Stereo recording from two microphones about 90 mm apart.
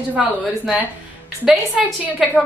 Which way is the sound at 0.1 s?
15° right (ahead or behind).